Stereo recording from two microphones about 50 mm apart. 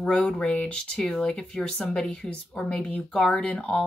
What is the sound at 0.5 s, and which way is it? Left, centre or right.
Speech, left.